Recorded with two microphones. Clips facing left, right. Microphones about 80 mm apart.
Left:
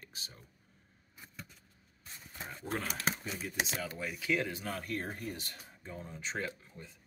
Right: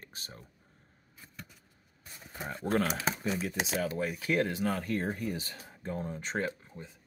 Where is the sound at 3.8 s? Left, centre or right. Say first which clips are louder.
Right 7 dB; right.